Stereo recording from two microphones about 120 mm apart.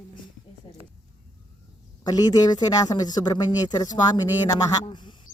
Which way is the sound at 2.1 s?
30° left (ahead or behind).